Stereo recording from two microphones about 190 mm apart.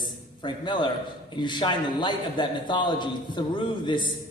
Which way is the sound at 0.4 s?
25° left (ahead or behind).